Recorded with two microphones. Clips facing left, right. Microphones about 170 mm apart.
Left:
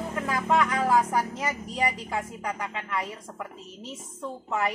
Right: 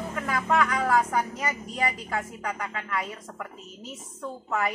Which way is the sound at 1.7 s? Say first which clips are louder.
Left 1 dB; 20° left (ahead or behind).